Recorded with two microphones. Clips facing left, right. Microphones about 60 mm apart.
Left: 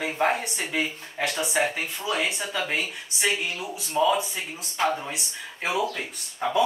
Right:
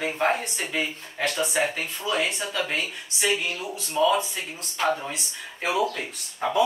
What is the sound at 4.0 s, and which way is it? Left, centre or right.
Speech, left.